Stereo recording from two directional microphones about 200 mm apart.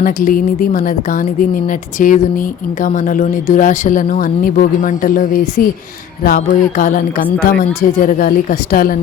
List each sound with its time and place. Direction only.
0.0 s a woman's voice: 40° left (ahead or behind)